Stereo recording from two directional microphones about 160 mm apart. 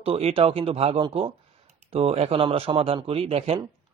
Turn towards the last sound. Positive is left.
turn(degrees=-35)  # may be behind; listen again after turning